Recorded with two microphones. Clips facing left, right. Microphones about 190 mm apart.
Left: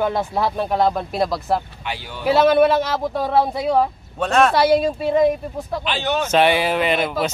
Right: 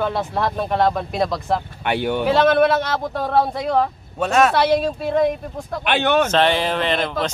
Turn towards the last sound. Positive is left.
turn(degrees=10)  # may be behind; listen again after turning